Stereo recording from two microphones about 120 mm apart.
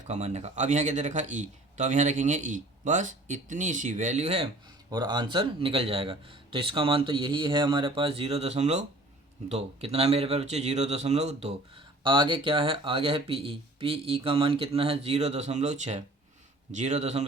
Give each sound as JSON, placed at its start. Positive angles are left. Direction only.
{"t": 0.1, "sound": "a man's voice", "side_deg": -70}
{"t": 4.9, "sound": "a man's voice", "side_deg": -35}
{"t": 12.0, "sound": "a man's voice", "side_deg": -40}